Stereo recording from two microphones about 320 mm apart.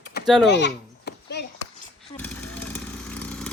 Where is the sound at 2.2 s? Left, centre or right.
Centre.